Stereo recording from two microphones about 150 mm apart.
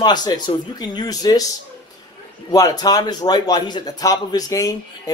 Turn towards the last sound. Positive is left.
turn(degrees=25)  # may be behind; listen again after turning